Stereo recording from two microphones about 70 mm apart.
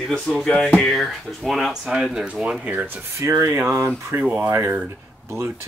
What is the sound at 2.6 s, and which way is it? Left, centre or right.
Speech, right.